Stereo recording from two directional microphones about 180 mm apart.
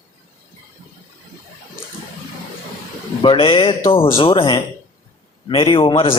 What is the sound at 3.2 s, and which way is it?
A man's voice, 30° left (ahead or behind).